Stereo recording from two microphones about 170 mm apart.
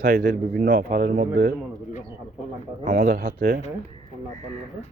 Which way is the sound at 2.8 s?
60° right (ahead or behind).